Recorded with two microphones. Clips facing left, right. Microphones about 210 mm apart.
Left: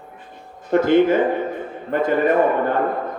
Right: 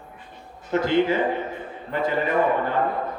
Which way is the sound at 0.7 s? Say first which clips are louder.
Left 6 dB; 50° left (ahead or behind).